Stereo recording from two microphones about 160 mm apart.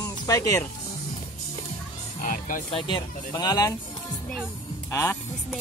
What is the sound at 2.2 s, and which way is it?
Music, 55° left (ahead or behind).